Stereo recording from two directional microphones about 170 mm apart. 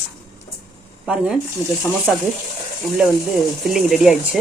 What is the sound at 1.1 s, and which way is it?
Speech, 5° right (ahead or behind).